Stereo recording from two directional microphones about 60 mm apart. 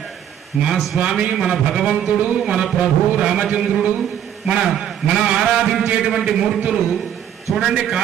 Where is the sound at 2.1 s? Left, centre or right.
Right.